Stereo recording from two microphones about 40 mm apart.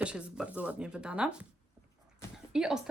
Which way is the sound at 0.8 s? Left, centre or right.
Right.